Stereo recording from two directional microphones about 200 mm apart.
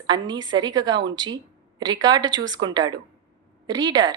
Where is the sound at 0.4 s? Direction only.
20° right (ahead or behind).